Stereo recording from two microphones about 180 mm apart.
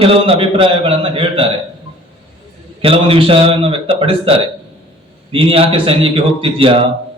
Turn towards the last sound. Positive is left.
turn(degrees=-30)  # may be behind; listen again after turning